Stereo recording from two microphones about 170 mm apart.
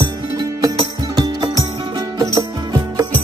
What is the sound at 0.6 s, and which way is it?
Music, 25° right (ahead or behind).